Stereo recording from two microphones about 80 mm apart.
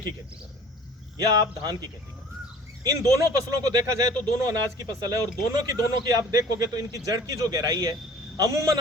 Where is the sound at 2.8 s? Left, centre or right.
Right.